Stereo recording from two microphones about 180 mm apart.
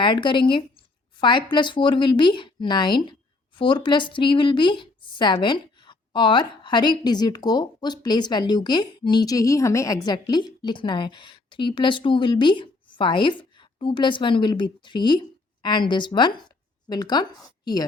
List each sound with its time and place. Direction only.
0.0 s speech: 25° left (ahead or behind)